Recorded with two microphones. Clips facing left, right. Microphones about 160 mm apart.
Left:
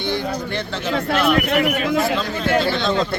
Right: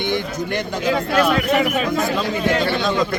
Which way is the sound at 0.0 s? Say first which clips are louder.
Right 1 dB; 15° right (ahead or behind).